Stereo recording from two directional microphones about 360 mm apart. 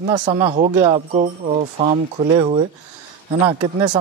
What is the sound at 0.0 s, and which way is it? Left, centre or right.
Speech, centre.